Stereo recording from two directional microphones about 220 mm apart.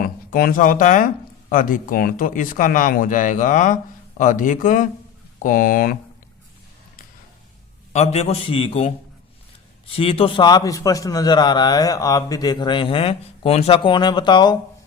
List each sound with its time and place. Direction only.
0.3 s speech: 40° left (ahead or behind)
7.9 s a man's voice: 30° left (ahead or behind)
9.9 s a man's voice: 25° left (ahead or behind)